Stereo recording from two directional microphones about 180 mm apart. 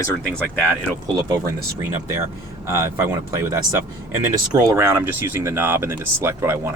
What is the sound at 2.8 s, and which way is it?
Speech, 15° right (ahead or behind).